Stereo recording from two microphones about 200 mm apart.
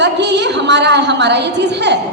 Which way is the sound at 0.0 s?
60° right (ahead or behind).